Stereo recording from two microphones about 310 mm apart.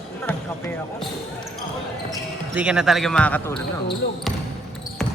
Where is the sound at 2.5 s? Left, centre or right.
Centre.